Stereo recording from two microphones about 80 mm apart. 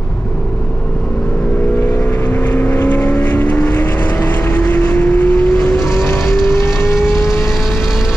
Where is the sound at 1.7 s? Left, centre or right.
Centre.